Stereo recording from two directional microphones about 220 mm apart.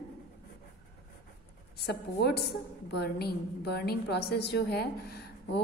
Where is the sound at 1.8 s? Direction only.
50° left (ahead or behind).